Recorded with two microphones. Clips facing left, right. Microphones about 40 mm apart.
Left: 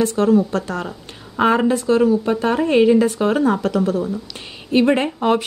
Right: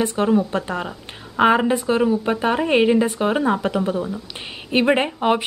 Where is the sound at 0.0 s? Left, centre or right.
Right.